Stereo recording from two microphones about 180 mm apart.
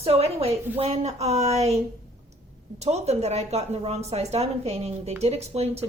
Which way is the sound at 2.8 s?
35° right (ahead or behind).